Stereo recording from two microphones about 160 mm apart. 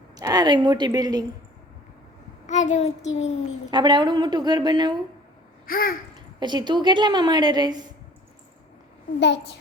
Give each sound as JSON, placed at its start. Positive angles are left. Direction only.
{"t": 0.2, "sound": "a woman's voice", "side_deg": -25}
{"t": 2.5, "sound": "child singing", "side_deg": 45}
{"t": 3.7, "sound": "a woman's voice", "side_deg": -25}
{"t": 5.6, "sound": "babbling", "side_deg": 65}
{"t": 6.1, "sound": "a woman's voice", "side_deg": -25}